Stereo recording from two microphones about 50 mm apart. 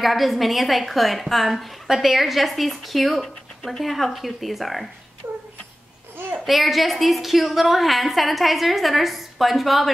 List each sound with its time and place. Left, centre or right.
0.0 s a woman's voice: centre
5.2 s cat: right
6.4 s a woman's voice: centre